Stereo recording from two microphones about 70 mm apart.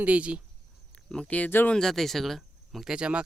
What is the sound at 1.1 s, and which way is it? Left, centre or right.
Speech, centre.